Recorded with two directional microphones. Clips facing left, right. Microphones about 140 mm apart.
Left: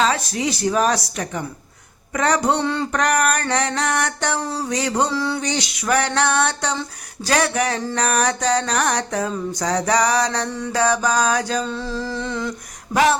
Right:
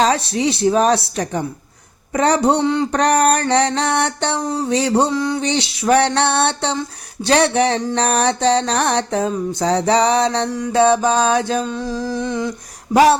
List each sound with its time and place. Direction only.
0.0 s a woman's voice: 30° right (ahead or behind)
2.6 s humming: 15° right (ahead or behind)
2.9 s a woman's voice: 30° right (ahead or behind)
4.4 s music: 20° right (ahead or behind)
5.0 s humming: 15° right (ahead or behind)
5.5 s music: 30° right (ahead or behind)
11.6 s humming: 15° right (ahead or behind)